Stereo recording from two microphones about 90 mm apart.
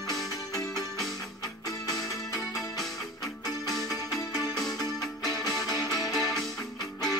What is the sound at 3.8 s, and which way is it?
Music, 45° left (ahead or behind).